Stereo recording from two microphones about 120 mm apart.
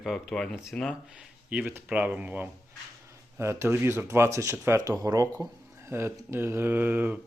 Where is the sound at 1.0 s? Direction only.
10° right (ahead or behind).